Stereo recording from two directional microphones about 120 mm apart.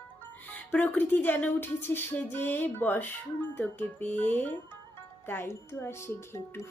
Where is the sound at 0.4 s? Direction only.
15° left (ahead or behind).